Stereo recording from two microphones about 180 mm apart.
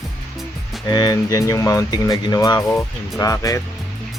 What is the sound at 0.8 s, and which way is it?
Speech, 20° left (ahead or behind).